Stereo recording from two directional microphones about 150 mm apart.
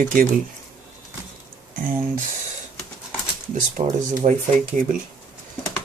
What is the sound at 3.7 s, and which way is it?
Speech, 55° right (ahead or behind).